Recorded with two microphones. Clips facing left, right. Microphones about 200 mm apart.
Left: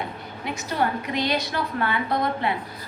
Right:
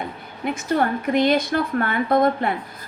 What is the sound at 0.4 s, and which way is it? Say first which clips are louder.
A woman's voice: right 5 dB; 50° right (ahead or behind).